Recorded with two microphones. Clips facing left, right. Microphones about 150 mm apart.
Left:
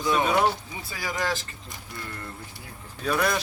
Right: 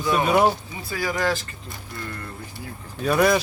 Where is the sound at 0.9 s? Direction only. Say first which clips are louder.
Right 5 dB; 15° left (ahead or behind).